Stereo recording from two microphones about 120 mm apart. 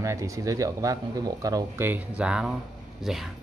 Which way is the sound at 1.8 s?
10° right (ahead or behind).